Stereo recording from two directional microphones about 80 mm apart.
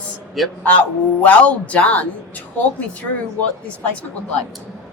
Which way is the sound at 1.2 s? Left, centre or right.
Centre.